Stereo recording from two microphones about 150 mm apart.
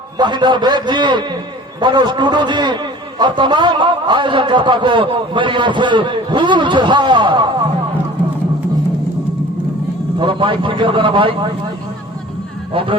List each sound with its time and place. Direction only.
0.2 s a man's voice: 30° right (ahead or behind)
10.2 s a man's voice: 35° right (ahead or behind)
12.7 s a man's voice: 35° right (ahead or behind)